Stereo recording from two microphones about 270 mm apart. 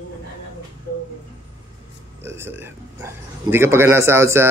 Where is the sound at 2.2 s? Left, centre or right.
Centre.